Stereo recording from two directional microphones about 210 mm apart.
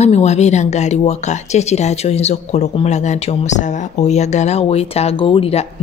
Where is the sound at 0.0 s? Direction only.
30° left (ahead or behind).